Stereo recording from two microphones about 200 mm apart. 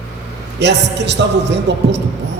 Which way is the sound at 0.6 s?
60° right (ahead or behind).